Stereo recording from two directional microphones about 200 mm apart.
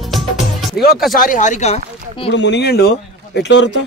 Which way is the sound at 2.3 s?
60° left (ahead or behind).